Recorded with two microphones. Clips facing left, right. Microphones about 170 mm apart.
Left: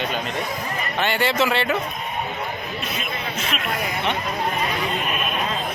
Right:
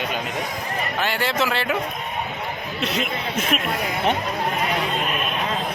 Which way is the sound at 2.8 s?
75° right (ahead or behind).